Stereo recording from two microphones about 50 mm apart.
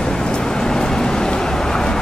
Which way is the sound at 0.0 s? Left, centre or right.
Centre.